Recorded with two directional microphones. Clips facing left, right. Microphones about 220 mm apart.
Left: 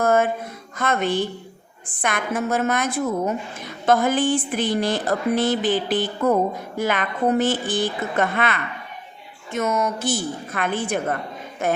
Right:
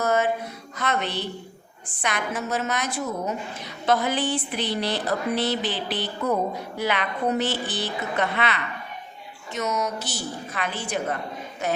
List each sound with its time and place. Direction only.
0.0 s music: 50° left (ahead or behind)
0.8 s a woman's voice: 50° left (ahead or behind)